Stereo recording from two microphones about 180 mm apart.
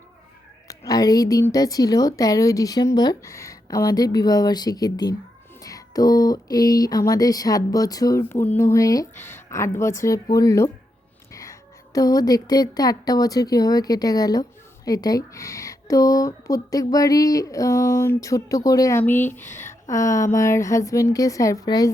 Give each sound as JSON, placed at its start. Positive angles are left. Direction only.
{"t": 0.7, "sound": "a woman's voice", "side_deg": 20}
{"t": 11.9, "sound": "speech", "side_deg": 20}
{"t": 19.5, "sound": "speech", "side_deg": 40}
{"t": 19.9, "sound": "speech", "side_deg": 15}